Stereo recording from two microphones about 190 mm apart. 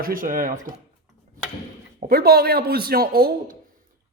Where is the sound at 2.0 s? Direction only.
50° right (ahead or behind).